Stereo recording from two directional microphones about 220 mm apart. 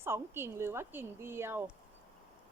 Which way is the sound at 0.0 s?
10° right (ahead or behind).